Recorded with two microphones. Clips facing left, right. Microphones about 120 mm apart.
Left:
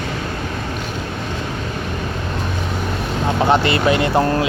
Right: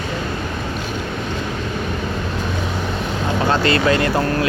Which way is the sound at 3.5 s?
20° left (ahead or behind).